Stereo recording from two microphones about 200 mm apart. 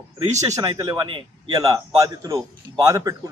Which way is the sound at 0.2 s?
35° right (ahead or behind).